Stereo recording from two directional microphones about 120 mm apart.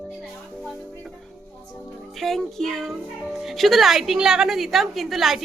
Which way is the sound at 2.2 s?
5° left (ahead or behind).